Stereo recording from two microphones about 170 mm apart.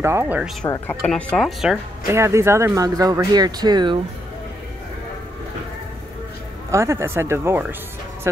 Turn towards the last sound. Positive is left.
turn(degrees=-10)  # may be behind; listen again after turning